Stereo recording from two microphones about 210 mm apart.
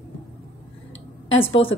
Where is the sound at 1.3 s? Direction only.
70° left (ahead or behind).